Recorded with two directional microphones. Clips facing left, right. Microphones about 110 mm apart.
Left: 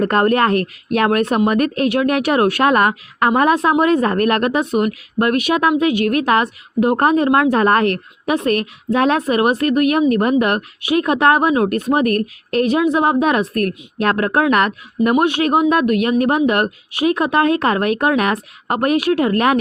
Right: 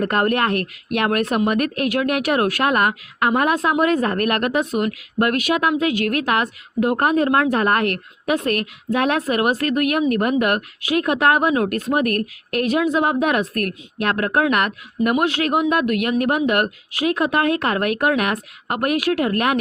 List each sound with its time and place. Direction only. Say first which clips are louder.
0.0 s a woman's voice: left 4 dB; 30° left (ahead or behind)